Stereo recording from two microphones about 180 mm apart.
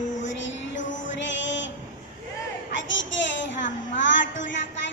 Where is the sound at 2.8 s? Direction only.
90° left.